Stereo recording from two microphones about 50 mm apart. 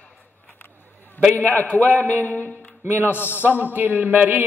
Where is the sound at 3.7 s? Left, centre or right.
Right.